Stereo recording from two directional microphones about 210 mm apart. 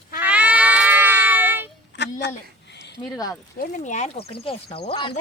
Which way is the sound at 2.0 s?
55° left (ahead or behind).